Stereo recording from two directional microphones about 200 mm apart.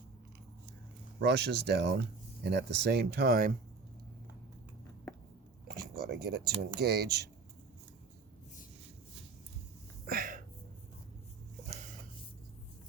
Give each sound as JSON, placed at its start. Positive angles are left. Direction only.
{"t": 1.2, "sound": "speech", "side_deg": -55}
{"t": 6.0, "sound": "speech", "side_deg": -50}
{"t": 10.1, "sound": "a sound", "side_deg": -45}